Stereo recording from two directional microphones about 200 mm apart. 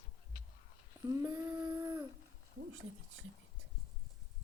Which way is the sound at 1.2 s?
15° right (ahead or behind).